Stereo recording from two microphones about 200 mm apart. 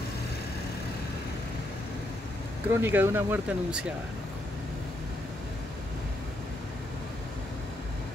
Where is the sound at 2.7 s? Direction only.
10° right (ahead or behind).